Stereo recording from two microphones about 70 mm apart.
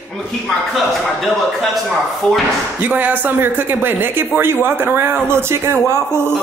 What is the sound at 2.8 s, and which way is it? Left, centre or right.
Speech, right.